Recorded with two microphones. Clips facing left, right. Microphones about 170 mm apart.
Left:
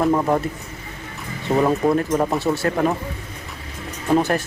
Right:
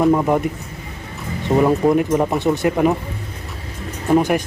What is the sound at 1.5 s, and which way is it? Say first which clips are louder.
Speech: right 3 dB; 5° right (ahead or behind).